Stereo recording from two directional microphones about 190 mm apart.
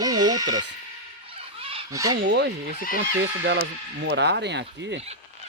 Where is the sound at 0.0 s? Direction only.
20° right (ahead or behind).